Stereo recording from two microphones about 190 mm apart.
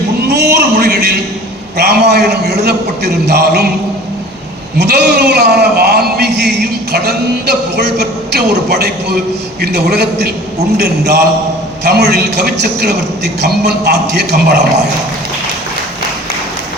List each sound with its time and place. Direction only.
0.3 s a sound: 60° right (ahead or behind)
1.8 s a man's voice: 55° right (ahead or behind)
4.8 s a man's voice: 60° right (ahead or behind)